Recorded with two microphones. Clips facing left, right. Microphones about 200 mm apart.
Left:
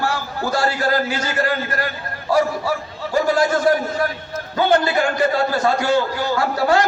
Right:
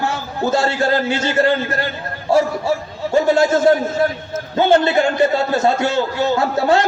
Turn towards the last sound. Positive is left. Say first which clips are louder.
# right 2 dB
turn(degrees=-25)  # may be behind; listen again after turning